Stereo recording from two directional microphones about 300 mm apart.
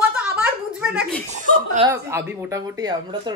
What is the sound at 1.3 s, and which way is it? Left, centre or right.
Speech, right.